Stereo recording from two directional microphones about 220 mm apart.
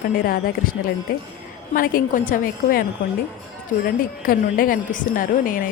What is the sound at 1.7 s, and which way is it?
Speech, 40° left (ahead or behind).